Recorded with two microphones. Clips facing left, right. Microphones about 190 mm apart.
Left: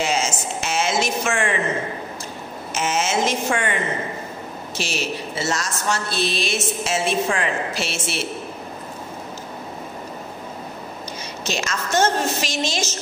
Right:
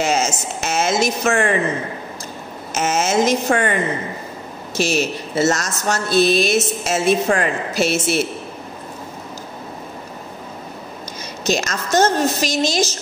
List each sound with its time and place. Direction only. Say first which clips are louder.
0.0 s speech: right 3 dB; 45° right (ahead or behind)
2.7 s a woman's voice: right 4 dB; 40° right (ahead or behind)
4.7 s speech: right 7 dB; 40° right (ahead or behind)
11.4 s a woman's voice: right 6 dB; 40° right (ahead or behind)